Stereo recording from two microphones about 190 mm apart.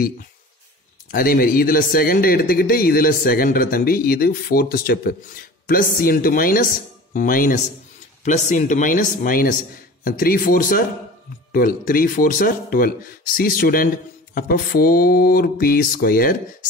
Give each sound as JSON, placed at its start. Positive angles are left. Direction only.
{"t": 1.1, "sound": "a man's voice", "side_deg": 50}